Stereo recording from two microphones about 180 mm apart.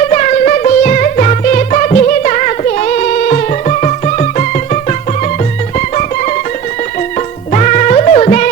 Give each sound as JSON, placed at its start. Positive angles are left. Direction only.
{"t": 0.0, "sound": "music", "side_deg": 40}